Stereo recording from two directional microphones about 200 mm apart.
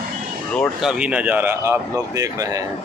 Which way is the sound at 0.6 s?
Centre (ahead or behind).